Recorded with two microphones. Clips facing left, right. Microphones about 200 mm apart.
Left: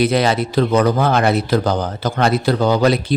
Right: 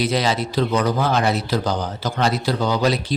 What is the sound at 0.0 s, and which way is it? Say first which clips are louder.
Speech: left 5 dB; 55° left (ahead or behind).